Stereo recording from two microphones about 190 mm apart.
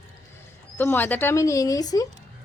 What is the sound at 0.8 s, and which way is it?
Speech, 10° left (ahead or behind).